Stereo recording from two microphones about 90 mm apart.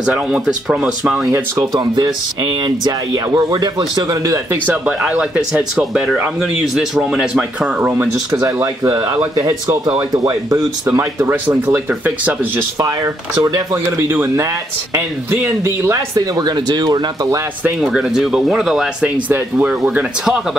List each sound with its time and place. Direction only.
0.0 s speech: 10° right (ahead or behind)
1.7 s speech: 55° right (ahead or behind)
4.6 s speech: 15° right (ahead or behind)
8.3 s speech: 35° right (ahead or behind)
12.7 s speech: 40° right (ahead or behind)
13.8 s speech: 25° right (ahead or behind)
16.2 s speech: 45° right (ahead or behind)
17.7 s speech: 5° right (ahead or behind)
19.2 s speech: 20° right (ahead or behind)